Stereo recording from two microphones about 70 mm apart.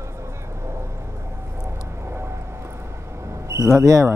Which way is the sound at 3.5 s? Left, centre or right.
Right.